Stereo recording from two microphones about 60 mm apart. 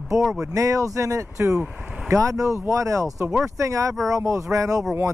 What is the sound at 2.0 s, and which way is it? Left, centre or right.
Speech, right.